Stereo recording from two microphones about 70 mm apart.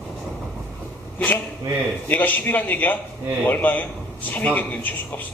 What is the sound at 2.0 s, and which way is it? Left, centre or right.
A man's voice, left.